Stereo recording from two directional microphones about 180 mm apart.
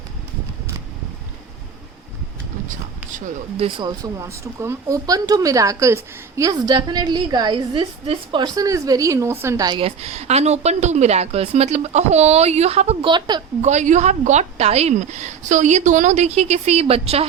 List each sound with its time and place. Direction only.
3.1 s speech: 45° right (ahead or behind)
3.8 s a woman's voice: 20° right (ahead or behind)
13.6 s a woman's voice: 40° right (ahead or behind)